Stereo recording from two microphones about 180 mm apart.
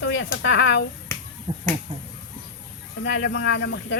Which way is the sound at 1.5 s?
40° right (ahead or behind).